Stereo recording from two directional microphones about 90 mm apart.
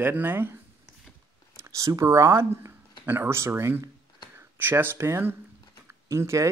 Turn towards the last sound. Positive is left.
turn(degrees=-35)  # may be behind; listen again after turning